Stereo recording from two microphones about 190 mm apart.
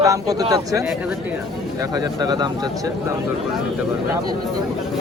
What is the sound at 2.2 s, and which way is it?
Speech, 20° right (ahead or behind).